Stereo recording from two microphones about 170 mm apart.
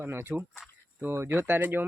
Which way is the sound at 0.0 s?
15° right (ahead or behind).